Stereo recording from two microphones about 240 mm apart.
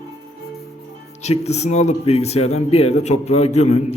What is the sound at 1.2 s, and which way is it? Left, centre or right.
A man's voice, left.